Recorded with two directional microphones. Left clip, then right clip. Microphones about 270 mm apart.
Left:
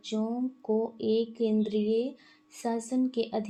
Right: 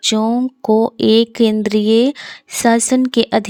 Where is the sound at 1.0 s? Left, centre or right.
Right.